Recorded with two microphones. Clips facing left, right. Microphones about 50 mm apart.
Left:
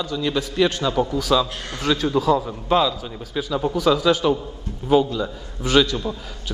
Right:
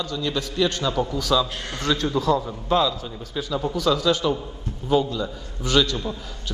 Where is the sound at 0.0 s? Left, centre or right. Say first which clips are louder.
Left 3 dB; centre.